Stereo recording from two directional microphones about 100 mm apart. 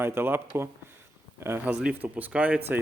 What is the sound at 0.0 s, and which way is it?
Speech, 25° right (ahead or behind).